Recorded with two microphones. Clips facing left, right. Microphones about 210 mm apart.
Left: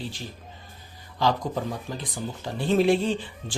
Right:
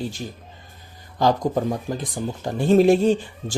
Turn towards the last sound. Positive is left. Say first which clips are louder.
# right 6 dB
turn(degrees=-45)  # may be behind; listen again after turning